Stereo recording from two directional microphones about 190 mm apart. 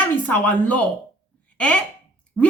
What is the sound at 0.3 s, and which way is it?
A woman's voice, 10° left (ahead or behind).